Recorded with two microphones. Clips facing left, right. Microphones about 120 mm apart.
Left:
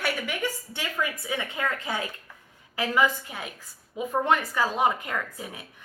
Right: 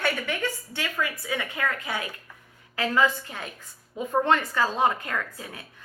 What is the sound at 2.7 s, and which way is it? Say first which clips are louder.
A woman's voice: right 1 dB; 15° left (ahead or behind).